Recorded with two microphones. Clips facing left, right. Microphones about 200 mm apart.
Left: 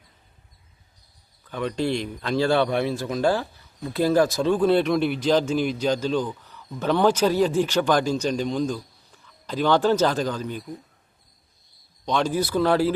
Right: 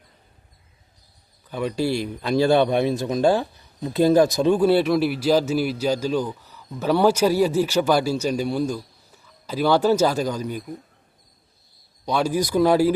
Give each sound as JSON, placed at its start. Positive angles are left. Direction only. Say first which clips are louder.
{"t": 1.5, "sound": "a man's voice", "louder": "right 2 dB", "side_deg": -10}
{"t": 12.0, "sound": "a man's voice", "louder": "right 1 dB", "side_deg": -10}